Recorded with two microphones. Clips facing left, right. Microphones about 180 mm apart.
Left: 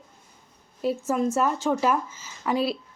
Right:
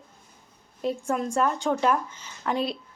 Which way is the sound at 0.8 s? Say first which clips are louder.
Left 3 dB; 5° left (ahead or behind).